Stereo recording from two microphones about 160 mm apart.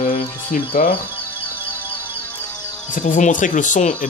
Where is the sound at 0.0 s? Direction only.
55° left (ahead or behind).